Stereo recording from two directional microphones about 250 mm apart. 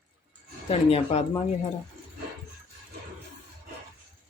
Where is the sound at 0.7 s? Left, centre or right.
Left.